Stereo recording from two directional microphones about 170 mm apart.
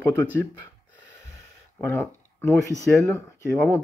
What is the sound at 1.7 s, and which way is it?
Speech, 10° left (ahead or behind).